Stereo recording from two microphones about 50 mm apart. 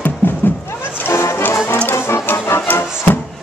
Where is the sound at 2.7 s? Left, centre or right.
Left.